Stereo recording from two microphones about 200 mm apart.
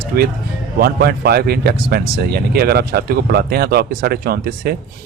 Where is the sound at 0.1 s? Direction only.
50° right (ahead or behind).